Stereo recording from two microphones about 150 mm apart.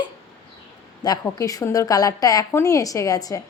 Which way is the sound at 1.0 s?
25° left (ahead or behind).